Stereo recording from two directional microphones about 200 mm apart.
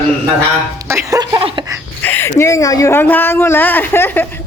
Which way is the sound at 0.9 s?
15° right (ahead or behind).